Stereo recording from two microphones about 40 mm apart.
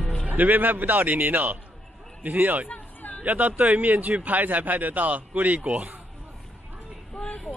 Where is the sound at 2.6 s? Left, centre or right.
Left.